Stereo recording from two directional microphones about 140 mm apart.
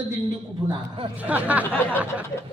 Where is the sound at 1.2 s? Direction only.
10° right (ahead or behind).